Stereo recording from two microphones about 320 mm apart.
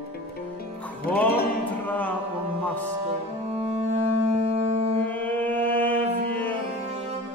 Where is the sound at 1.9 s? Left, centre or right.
Centre.